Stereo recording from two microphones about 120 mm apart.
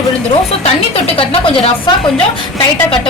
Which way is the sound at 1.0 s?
50° left (ahead or behind).